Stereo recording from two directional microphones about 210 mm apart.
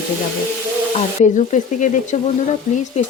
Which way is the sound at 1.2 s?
35° left (ahead or behind).